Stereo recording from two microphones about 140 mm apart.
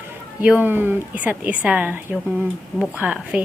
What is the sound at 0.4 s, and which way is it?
A woman's voice, 10° right (ahead or behind).